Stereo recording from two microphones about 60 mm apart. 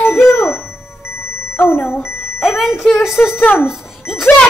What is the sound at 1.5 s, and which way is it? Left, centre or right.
Speech, left.